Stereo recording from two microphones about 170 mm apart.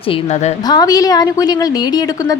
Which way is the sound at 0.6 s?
20° left (ahead or behind).